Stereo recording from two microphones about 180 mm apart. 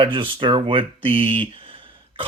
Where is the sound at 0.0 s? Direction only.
30° right (ahead or behind).